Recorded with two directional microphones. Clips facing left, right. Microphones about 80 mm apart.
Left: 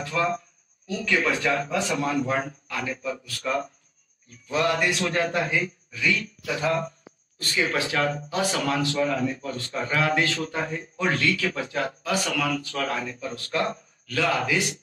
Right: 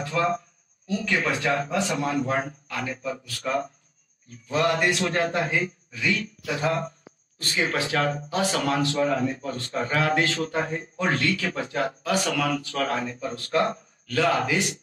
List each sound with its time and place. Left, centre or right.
0.0 s a man's voice: right
1.1 s a man's voice: centre
1.4 s speech: right
4.5 s speech: right
5.0 s a man's voice: centre
5.3 s speech: right
7.9 s speech: right